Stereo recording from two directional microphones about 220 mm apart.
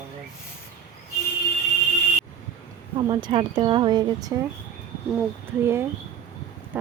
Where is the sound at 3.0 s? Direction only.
20° right (ahead or behind).